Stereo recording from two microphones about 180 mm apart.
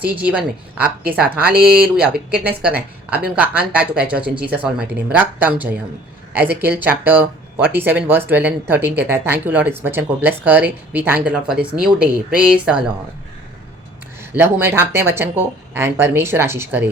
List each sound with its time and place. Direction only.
0.0 s speech: 10° right (ahead or behind)
1.6 s speech: 60° right (ahead or behind)
2.6 s speech: 5° right (ahead or behind)
14.2 s speech: 10° right (ahead or behind)